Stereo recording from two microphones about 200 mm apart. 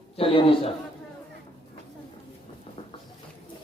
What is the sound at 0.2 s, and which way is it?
Speech, 25° left (ahead or behind).